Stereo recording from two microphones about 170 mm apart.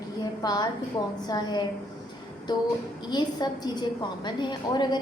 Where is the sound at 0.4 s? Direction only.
25° left (ahead or behind).